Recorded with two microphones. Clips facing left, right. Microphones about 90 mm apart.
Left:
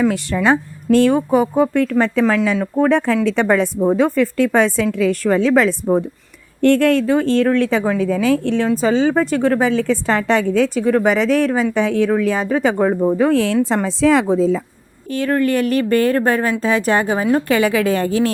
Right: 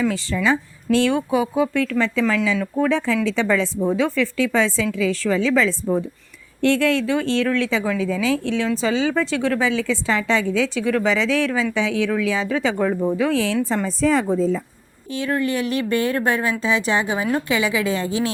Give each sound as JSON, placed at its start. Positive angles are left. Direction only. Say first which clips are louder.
{"t": 0.0, "sound": "a woman's voice", "louder": "left 4 dB", "side_deg": 60}
{"t": 12.5, "sound": "a woman's voice", "louder": "left 5 dB", "side_deg": 40}
{"t": 13.7, "sound": "a woman's voice", "louder": "left 5 dB", "side_deg": 75}
{"t": 15.1, "sound": "a woman's voice", "louder": "left 5 dB", "side_deg": 50}